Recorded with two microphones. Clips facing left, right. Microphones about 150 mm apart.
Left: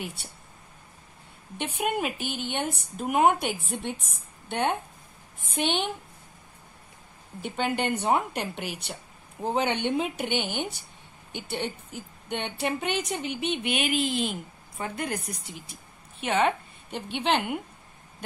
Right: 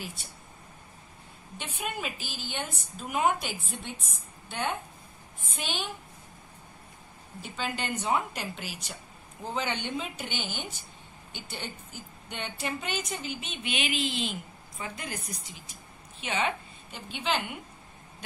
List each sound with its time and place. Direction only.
0.0 s a woman's voice: 65° left (ahead or behind)
1.6 s a woman's voice: 60° left (ahead or behind)
7.4 s a woman's voice: 60° left (ahead or behind)